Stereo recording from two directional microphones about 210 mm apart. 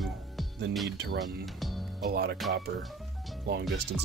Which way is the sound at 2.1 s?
50° right (ahead or behind).